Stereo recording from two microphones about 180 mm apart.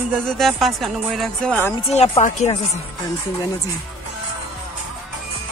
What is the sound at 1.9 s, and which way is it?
Speech, 35° left (ahead or behind).